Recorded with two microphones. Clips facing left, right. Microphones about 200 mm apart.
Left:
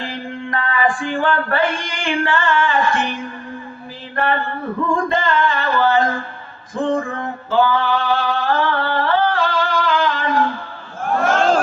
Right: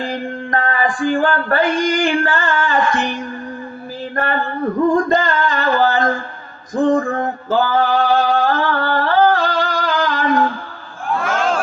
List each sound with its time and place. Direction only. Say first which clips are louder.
0.1 s female singing: right 4 dB; 40° right (ahead or behind)
4.1 s a sound: left 1 dB; 40° right (ahead or behind)
5.0 s music: right 1 dB; 40° right (ahead or behind)
6.8 s male singing: right 5 dB; 40° right (ahead or behind)
11.0 s crowd: left 3 dB; 40° left (ahead or behind)